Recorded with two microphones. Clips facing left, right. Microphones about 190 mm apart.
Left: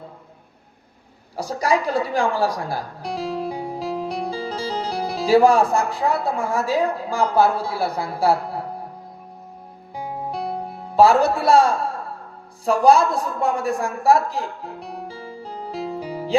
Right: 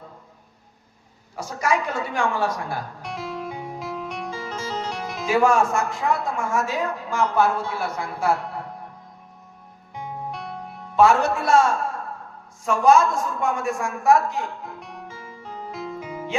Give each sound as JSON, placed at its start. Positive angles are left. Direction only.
{"t": 1.4, "sound": "speech", "side_deg": 35}
{"t": 9.9, "sound": "music", "side_deg": 35}
{"t": 12.6, "sound": "a woman's voice", "side_deg": 35}